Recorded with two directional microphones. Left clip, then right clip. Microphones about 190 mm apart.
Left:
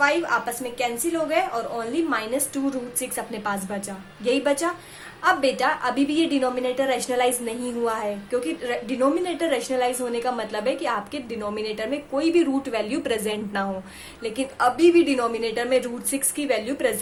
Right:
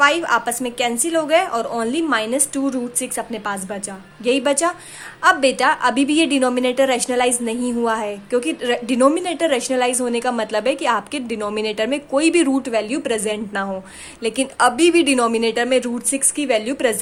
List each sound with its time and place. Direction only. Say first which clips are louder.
0.0 s a woman's voice: right 5 dB; 40° right (ahead or behind)
12.7 s a woman's voice: right 5 dB; 25° right (ahead or behind)
14.2 s a woman's voice: right 7 dB; 35° right (ahead or behind)